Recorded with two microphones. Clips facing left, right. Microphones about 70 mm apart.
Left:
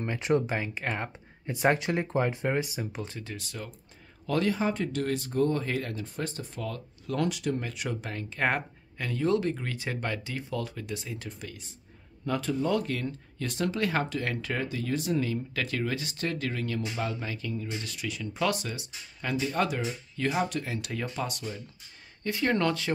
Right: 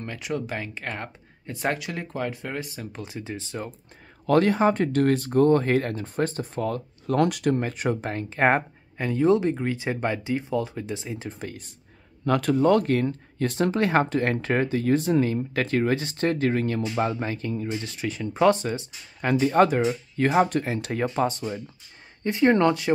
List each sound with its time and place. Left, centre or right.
0.2 s speech: left
0.5 s speech: centre
3.2 s speech: right
4.3 s speech: right
12.3 s speech: right
19.2 s speech: right